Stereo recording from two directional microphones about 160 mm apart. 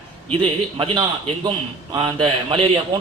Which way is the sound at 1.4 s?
30° right (ahead or behind).